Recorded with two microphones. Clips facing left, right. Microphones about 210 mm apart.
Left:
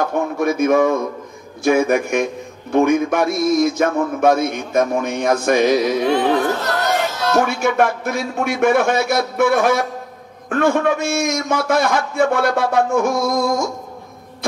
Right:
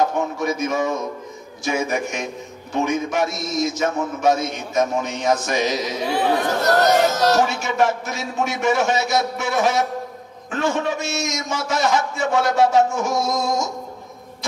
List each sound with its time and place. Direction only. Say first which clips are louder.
0.4 s a man's voice: left 10 dB; 55° left (ahead or behind)
6.6 s a sound: right 4 dB; 40° right (ahead or behind)
7.6 s a man's voice: left 3 dB; 55° left (ahead or behind)